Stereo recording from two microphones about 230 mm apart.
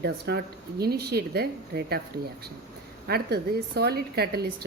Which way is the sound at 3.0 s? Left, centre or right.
Right.